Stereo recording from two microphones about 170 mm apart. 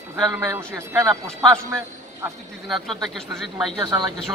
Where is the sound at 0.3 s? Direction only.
15° right (ahead or behind).